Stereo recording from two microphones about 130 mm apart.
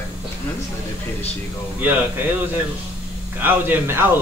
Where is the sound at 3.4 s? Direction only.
15° right (ahead or behind).